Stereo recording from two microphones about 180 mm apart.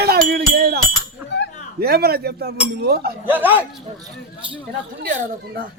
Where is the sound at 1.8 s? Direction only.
60° right (ahead or behind).